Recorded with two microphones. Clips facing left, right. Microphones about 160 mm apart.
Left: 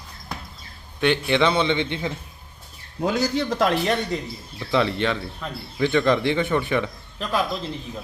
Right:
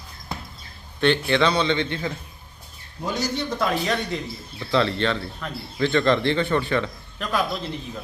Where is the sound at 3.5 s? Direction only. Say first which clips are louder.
Left 3 dB; 70° left (ahead or behind).